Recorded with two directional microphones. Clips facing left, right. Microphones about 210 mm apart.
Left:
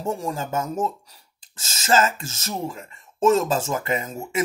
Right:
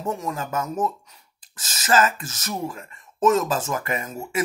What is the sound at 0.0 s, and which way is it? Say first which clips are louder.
Speech: left 1 dB; 30° left (ahead or behind).